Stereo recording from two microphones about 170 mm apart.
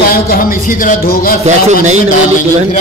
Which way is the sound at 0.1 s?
60° left (ahead or behind).